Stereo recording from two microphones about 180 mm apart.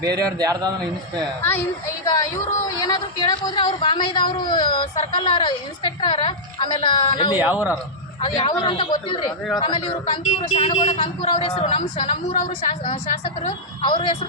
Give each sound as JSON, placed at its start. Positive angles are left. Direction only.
{"t": 0.3, "sound": "a man's voice", "side_deg": -20}
{"t": 2.0, "sound": "speech", "side_deg": 20}
{"t": 7.3, "sound": "a man's voice", "side_deg": -10}
{"t": 8.2, "sound": "a man's voice", "side_deg": 25}